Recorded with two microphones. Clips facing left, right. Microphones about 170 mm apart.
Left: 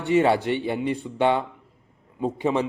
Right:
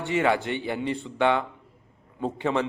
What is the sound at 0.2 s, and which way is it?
Speech, 20° left (ahead or behind).